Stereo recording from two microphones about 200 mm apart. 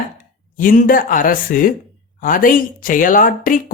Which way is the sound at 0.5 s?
45° left (ahead or behind).